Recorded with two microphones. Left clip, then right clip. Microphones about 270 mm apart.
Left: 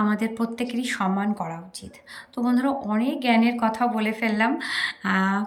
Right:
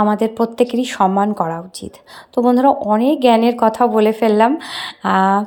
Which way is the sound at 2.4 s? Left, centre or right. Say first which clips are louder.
Right 13 dB; right.